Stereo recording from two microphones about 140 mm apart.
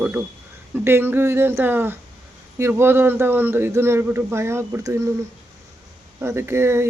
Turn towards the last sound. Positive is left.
turn(degrees=-20)  # may be behind; listen again after turning